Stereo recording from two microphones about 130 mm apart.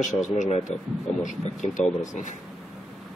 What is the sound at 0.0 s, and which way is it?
Speech, 70° left (ahead or behind).